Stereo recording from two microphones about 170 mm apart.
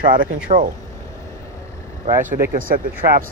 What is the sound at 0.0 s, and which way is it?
Speech, 55° right (ahead or behind).